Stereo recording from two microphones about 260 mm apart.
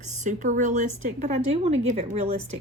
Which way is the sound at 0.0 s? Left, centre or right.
Right.